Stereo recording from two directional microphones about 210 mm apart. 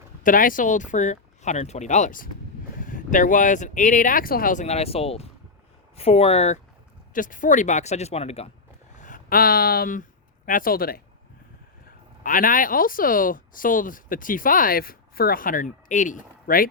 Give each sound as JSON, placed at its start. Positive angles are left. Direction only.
{"t": 0.2, "sound": "speech", "side_deg": 40}
{"t": 12.2, "sound": "speech", "side_deg": 40}